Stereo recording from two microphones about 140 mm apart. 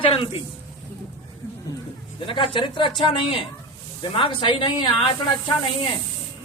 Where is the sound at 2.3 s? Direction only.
40° left (ahead or behind).